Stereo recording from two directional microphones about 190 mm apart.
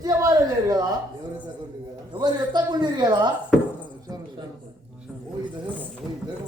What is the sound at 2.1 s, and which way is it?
A man's voice, 20° right (ahead or behind).